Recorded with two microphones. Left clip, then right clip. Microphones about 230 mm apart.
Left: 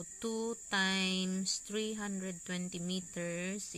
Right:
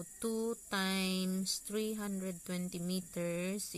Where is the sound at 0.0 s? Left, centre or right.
Centre.